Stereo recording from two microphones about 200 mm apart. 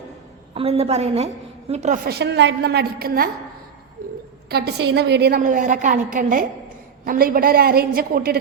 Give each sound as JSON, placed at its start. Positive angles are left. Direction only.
{"t": 0.5, "sound": "a woman's voice", "side_deg": -30}
{"t": 2.0, "sound": "a woman's voice", "side_deg": -55}
{"t": 4.4, "sound": "a woman's voice", "side_deg": -55}